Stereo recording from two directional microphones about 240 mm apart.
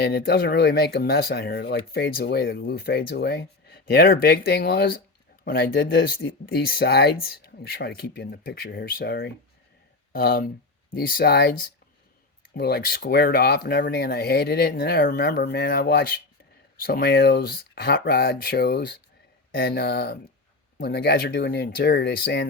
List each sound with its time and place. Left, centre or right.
0.0 s speech: left